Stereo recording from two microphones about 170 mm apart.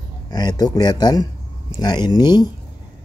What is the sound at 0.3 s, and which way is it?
Speech, 25° left (ahead or behind).